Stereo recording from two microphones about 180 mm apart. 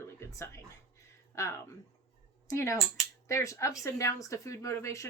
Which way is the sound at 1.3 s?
15° left (ahead or behind).